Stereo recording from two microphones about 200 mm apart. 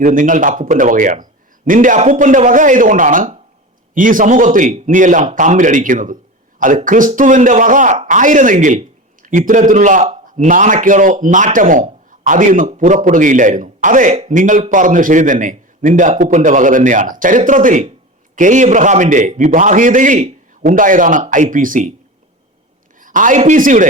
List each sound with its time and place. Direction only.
0.0 s a man's voice: 40° right (ahead or behind)
23.0 s speech: 40° right (ahead or behind)